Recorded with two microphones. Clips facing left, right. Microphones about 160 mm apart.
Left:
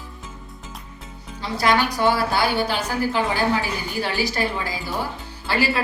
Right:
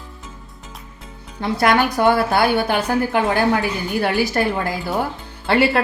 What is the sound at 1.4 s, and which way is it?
A woman's voice, 55° right (ahead or behind).